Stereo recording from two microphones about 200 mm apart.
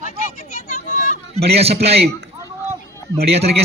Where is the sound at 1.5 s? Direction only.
30° right (ahead or behind).